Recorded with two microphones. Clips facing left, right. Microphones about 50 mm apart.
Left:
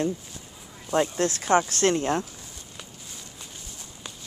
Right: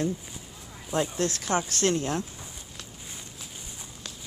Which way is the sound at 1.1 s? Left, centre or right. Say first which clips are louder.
Left 5 dB; left.